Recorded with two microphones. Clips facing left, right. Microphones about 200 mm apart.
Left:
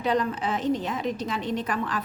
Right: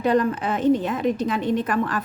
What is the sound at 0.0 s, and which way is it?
A woman's voice, 50° right (ahead or behind).